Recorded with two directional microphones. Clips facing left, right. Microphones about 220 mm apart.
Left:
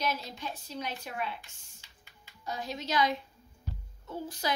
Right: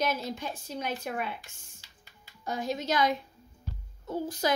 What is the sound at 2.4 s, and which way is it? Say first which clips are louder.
A woman's voice: right 5 dB; 50° right (ahead or behind).